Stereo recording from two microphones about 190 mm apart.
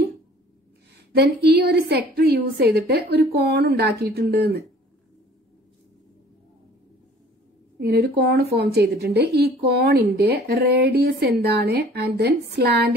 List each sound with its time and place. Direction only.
1.1 s a woman's voice: 60° right (ahead or behind)
7.8 s a woman's voice: 55° right (ahead or behind)